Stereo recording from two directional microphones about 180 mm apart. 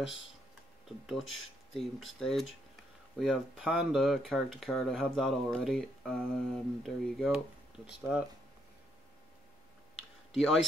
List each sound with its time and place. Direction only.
0.0 s speech: 90° left
0.8 s speech: centre (ahead or behind)
10.3 s speech: centre (ahead or behind)